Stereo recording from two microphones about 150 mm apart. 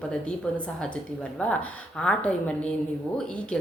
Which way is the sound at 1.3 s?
10° left (ahead or behind).